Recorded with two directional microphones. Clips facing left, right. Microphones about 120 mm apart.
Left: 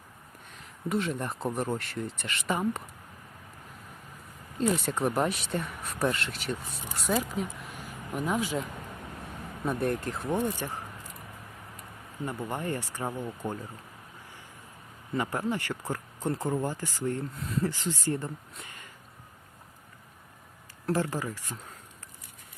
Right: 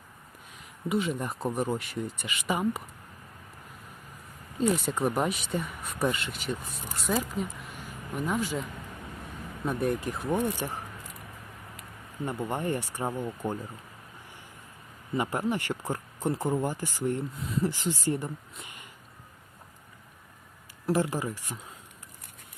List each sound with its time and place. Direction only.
0.9 s speech: centre (ahead or behind)
4.5 s speech: centre (ahead or behind)
9.6 s speech: centre (ahead or behind)
10.6 s speech: 15° right (ahead or behind)
12.2 s speech: 20° right (ahead or behind)
15.1 s speech: 15° right (ahead or behind)
17.3 s speech: centre (ahead or behind)
17.7 s speech: 15° right (ahead or behind)
18.6 s a sound: 15° right (ahead or behind)
20.9 s speech: 15° right (ahead or behind)